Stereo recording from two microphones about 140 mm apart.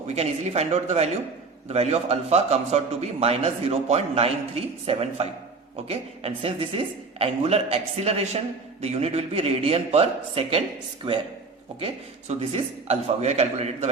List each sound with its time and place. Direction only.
0.1 s a man's voice: 50° right (ahead or behind)
12.3 s a man's voice: 50° right (ahead or behind)